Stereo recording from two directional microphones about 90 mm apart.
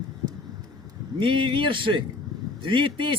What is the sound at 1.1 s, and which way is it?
A man's voice, 70° right (ahead or behind).